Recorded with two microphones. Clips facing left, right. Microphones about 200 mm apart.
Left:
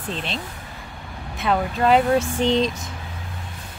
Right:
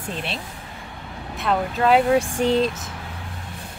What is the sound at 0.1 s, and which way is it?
Speech, 10° right (ahead or behind).